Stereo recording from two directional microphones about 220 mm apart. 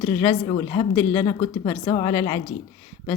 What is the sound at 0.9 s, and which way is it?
Speech, 10° left (ahead or behind).